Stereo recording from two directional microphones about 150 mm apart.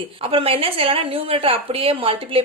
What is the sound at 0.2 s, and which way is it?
A woman's voice, 40° right (ahead or behind).